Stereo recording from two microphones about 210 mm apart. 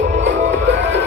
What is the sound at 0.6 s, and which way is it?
Music, 55° right (ahead or behind).